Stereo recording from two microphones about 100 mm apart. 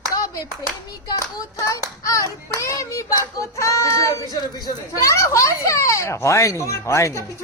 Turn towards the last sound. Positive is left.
turn(degrees=30)  # may be behind; listen again after turning